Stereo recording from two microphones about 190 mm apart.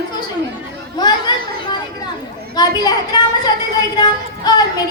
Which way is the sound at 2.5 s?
20° left (ahead or behind).